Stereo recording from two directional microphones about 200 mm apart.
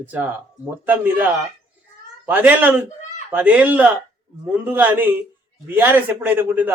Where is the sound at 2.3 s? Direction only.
10° right (ahead or behind).